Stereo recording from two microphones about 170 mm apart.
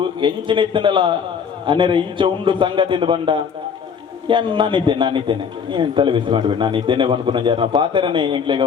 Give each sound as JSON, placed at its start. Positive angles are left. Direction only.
{"t": 0.2, "sound": "a man's voice", "side_deg": -30}